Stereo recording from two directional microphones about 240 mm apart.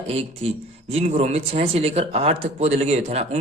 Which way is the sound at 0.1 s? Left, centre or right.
Right.